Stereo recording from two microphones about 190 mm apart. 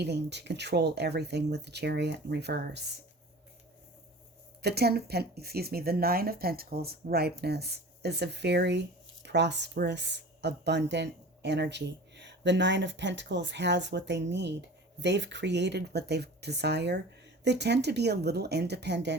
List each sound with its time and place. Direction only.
0.0 s speech: 65° right (ahead or behind)
4.6 s speech: 60° right (ahead or behind)